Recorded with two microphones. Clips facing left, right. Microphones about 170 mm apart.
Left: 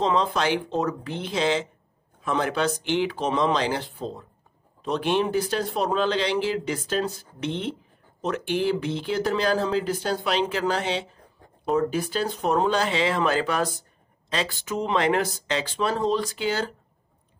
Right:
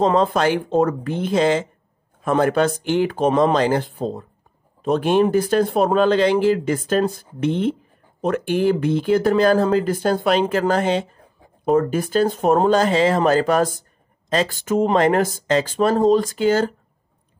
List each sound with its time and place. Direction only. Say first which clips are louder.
0.0 s speech: right 6 dB; 50° right (ahead or behind)